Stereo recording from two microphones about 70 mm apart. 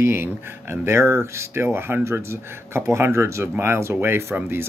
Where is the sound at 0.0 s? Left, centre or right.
Right.